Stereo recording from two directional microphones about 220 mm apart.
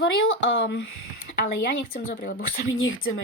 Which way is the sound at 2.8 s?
65° left (ahead or behind).